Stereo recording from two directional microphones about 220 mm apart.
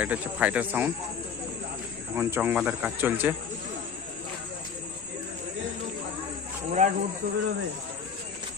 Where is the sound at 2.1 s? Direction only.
10° right (ahead or behind).